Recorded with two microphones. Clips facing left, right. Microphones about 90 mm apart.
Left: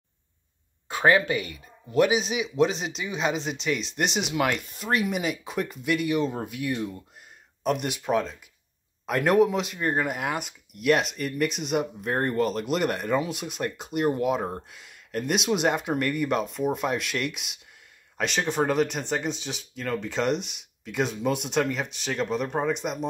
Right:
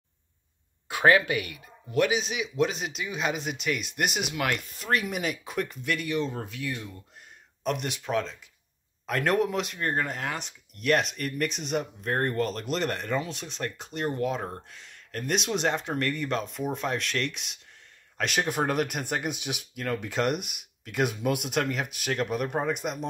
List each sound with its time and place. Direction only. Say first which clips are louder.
2.0 s speech: left 3 dB; 5° left (ahead or behind); by 7.0 s 20° left (ahead or behind)
7.6 s speech: left 4 dB; 5° left (ahead or behind)